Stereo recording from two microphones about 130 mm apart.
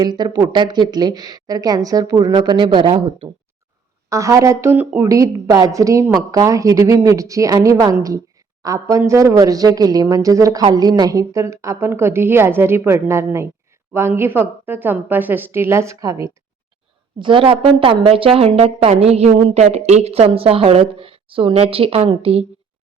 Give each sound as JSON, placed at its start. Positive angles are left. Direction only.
{"t": 0.0, "sound": "speech", "side_deg": -35}
{"t": 4.1, "sound": "a woman's voice", "side_deg": -25}
{"t": 17.2, "sound": "a woman's voice", "side_deg": -40}